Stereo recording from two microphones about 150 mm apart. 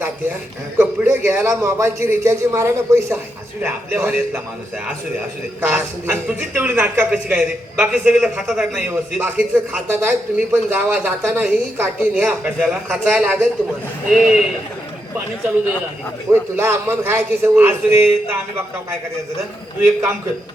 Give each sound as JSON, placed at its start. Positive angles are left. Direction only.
{"t": 0.8, "sound": "speech", "side_deg": -15}
{"t": 5.7, "sound": "speech", "side_deg": -10}
{"t": 16.3, "sound": "speech", "side_deg": -15}
{"t": 19.8, "sound": "speech", "side_deg": -15}